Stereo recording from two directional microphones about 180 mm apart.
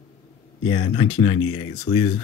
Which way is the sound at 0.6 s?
25° left (ahead or behind).